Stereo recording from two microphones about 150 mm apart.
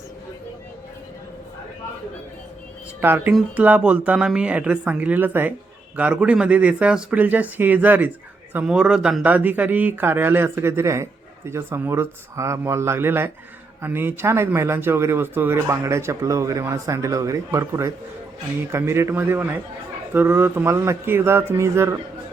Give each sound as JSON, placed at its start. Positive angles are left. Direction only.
{"t": 3.0, "sound": "speech", "side_deg": -15}